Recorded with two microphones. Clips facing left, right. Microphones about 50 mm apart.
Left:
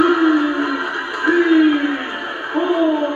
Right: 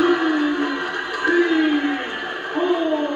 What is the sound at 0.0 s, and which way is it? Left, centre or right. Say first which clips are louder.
Music: left 4 dB; left.